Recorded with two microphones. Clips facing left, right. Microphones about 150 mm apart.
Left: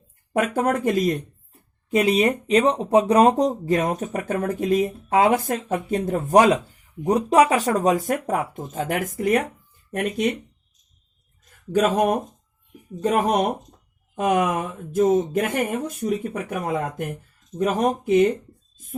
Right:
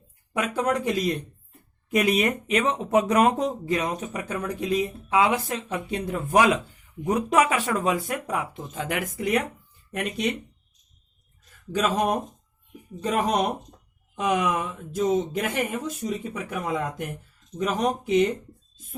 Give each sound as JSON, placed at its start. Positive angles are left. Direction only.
{"t": 0.3, "sound": "speech", "side_deg": 50}
{"t": 1.9, "sound": "speech", "side_deg": 30}
{"t": 11.7, "sound": "speech", "side_deg": 55}